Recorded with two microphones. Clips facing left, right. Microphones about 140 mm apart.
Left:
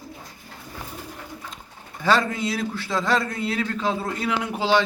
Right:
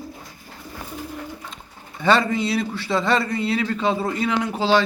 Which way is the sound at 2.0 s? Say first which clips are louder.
Right 3 dB; centre (ahead or behind).